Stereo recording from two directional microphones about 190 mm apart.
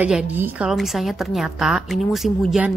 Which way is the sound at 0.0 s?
10° right (ahead or behind).